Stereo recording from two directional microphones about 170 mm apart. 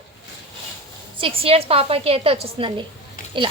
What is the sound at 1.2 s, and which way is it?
A woman's voice, 35° right (ahead or behind).